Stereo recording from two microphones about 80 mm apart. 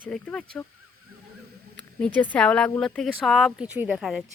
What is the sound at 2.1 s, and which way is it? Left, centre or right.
Speech, centre.